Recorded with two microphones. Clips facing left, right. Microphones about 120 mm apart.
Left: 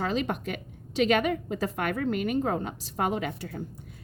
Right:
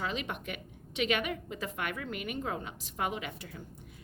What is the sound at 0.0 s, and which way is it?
Speech, 40° left (ahead or behind).